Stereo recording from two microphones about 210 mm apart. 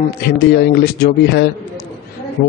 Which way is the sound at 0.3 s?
50° left (ahead or behind).